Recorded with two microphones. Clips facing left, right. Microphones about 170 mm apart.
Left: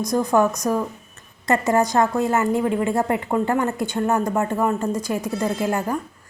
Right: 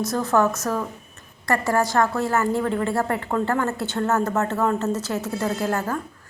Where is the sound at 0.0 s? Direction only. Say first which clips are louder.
Left 2 dB; 15° left (ahead or behind).